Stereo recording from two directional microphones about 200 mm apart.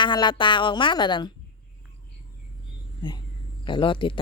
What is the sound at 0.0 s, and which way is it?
Speech, 25° left (ahead or behind).